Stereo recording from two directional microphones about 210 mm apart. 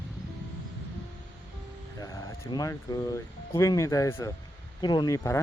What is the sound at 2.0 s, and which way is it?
Speech, 15° left (ahead or behind).